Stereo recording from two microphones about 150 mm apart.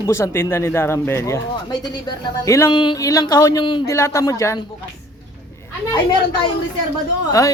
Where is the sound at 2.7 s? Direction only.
30° left (ahead or behind).